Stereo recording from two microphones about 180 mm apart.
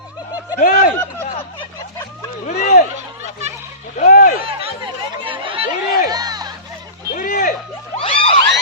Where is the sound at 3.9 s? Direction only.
45° left (ahead or behind).